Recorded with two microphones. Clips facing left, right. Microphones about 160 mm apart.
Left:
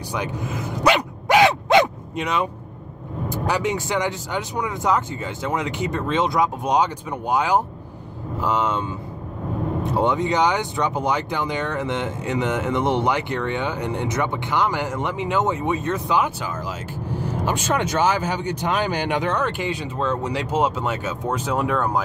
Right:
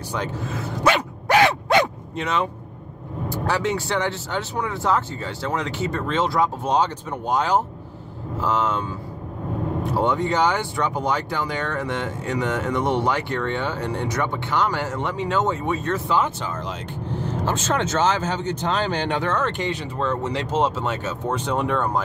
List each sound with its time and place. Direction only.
0.1 s dog: 15° left (ahead or behind)
3.3 s speech: 15° left (ahead or behind)
9.9 s speech: 20° left (ahead or behind)